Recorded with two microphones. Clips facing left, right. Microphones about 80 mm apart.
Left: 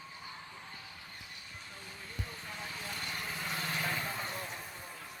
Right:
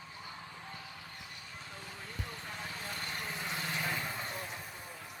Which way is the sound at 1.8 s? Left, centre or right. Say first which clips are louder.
Even; right.